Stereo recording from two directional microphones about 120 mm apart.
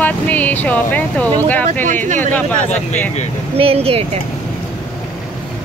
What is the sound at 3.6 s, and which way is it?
Speech, 55° right (ahead or behind).